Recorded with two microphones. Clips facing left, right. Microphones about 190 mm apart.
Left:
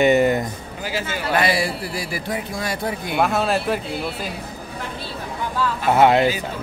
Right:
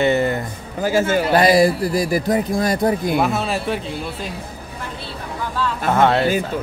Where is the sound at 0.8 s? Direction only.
45° right (ahead or behind).